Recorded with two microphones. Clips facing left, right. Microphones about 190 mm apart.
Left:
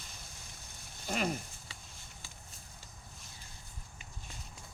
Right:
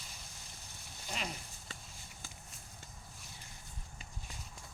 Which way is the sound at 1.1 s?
50° left (ahead or behind).